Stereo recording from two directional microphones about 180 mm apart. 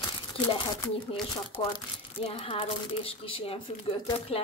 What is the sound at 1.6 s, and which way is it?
Speech, 25° left (ahead or behind).